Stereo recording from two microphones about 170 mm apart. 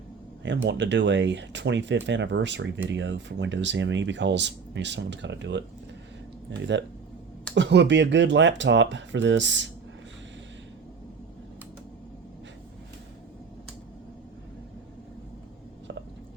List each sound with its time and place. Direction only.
0.4 s speech: 90° right
7.5 s speech: 90° right